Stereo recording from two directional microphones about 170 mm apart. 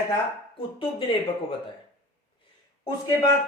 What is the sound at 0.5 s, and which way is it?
Speech, 30° left (ahead or behind).